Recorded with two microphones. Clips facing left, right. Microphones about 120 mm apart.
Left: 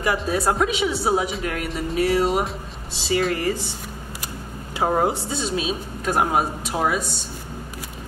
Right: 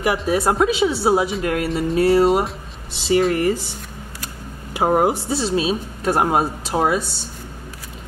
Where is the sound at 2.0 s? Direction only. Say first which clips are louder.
Right 5 dB; 30° right (ahead or behind).